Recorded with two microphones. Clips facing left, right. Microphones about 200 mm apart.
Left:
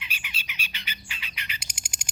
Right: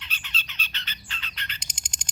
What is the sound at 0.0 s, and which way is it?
Bird, 10° left (ahead or behind).